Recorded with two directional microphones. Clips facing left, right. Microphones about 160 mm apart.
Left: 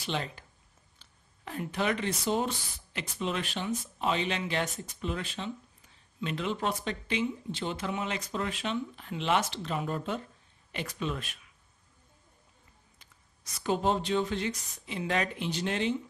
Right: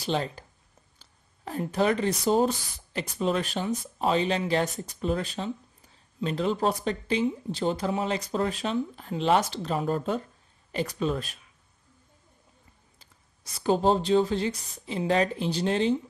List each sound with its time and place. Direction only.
0.0 s speech: 35° right (ahead or behind)
13.0 s speech: 30° right (ahead or behind)